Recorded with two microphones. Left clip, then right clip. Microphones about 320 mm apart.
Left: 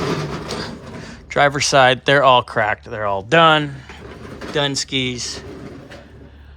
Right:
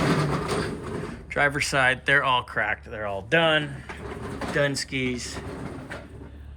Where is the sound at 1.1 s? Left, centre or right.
Centre.